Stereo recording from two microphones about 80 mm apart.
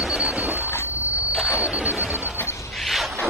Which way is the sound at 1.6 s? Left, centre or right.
Centre.